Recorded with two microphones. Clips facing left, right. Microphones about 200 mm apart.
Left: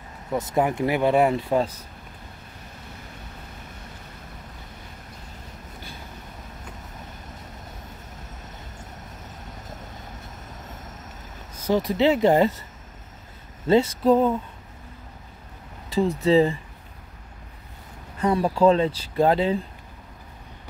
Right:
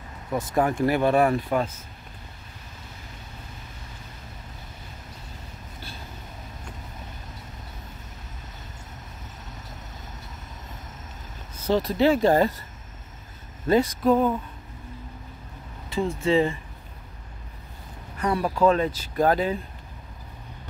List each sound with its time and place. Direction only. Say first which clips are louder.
0.3 s speech: left 1 dB; 20° left (ahead or behind)
11.6 s speech: even; 15° left (ahead or behind)
13.7 s speech: left 2 dB; 25° left (ahead or behind)
15.9 s speech: left 3 dB; 35° left (ahead or behind)
18.2 s speech: left 3 dB; 25° left (ahead or behind)